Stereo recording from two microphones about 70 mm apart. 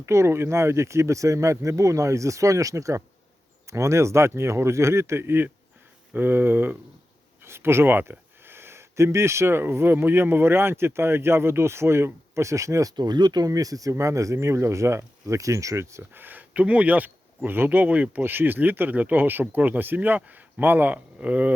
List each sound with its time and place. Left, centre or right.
0.0 s speech: right
13.0 s speech: right
16.2 s speech: right